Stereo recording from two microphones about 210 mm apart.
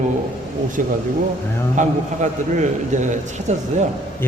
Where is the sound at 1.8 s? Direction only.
35° right (ahead or behind).